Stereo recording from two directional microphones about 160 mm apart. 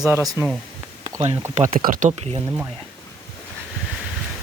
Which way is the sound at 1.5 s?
55° right (ahead or behind).